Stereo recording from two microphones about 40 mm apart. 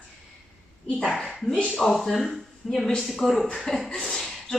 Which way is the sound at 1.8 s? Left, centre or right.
Centre.